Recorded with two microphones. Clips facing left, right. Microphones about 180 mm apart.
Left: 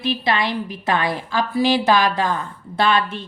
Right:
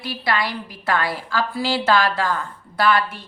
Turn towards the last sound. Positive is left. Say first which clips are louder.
# left 1 dB
turn(degrees=25)  # may be behind; listen again after turning